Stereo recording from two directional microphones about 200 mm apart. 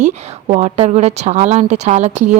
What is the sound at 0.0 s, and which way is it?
A woman's voice, 35° right (ahead or behind).